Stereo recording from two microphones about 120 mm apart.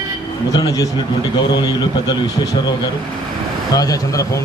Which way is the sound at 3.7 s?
30° left (ahead or behind).